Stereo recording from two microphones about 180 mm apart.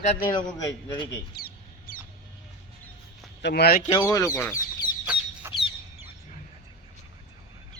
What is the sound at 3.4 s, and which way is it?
Speech, 65° left (ahead or behind).